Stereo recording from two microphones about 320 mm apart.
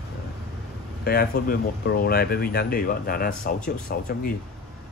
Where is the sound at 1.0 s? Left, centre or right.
Left.